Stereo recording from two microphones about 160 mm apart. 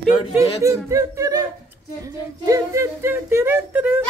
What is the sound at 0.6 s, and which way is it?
Speech, 20° right (ahead or behind).